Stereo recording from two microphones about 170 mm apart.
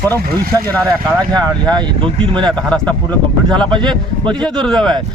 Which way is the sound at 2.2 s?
30° right (ahead or behind).